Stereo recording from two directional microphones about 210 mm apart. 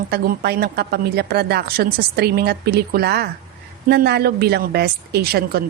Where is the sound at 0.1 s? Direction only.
50° right (ahead or behind).